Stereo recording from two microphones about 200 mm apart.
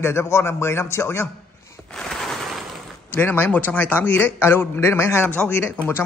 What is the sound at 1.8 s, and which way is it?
Speech, 5° left (ahead or behind).